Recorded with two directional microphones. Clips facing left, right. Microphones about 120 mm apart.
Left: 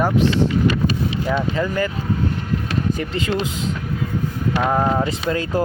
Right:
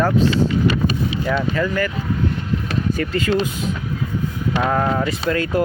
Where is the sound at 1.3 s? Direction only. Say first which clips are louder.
Right 1 dB; 20° left (ahead or behind).